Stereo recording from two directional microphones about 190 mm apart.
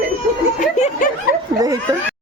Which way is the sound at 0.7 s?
35° left (ahead or behind).